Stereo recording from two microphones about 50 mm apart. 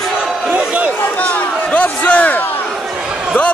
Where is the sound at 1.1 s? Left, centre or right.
Left.